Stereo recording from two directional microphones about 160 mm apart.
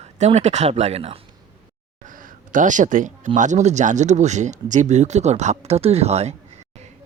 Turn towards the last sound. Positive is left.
turn(degrees=-40)  # may be behind; listen again after turning